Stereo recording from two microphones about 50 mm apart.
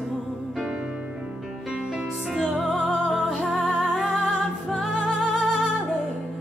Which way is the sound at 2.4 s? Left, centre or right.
Centre.